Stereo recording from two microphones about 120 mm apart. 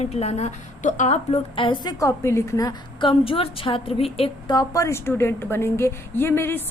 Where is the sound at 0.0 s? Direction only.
65° left (ahead or behind).